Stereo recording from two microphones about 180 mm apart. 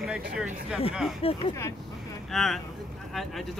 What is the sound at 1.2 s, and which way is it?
Speech, 30° left (ahead or behind).